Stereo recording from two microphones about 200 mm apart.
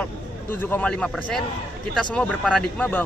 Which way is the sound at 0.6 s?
10° left (ahead or behind).